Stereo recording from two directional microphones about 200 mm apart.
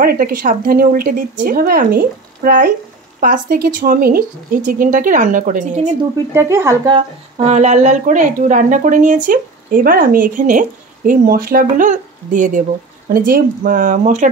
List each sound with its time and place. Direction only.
0.0 s speech: 45° right (ahead or behind)
6.3 s speech: 15° right (ahead or behind); by 14.3 s 40° right (ahead or behind)